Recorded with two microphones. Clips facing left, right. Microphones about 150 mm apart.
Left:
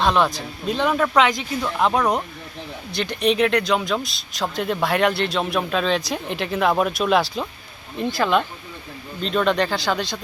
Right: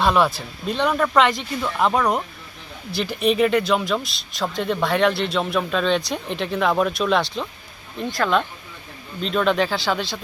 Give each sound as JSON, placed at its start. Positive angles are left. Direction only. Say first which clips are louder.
{"t": 0.0, "sound": "speech", "louder": "right 1 dB", "side_deg": -5}